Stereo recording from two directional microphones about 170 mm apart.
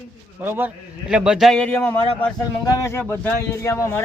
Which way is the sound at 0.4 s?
10° right (ahead or behind).